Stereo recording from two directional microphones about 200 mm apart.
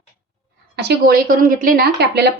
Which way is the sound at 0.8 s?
55° right (ahead or behind).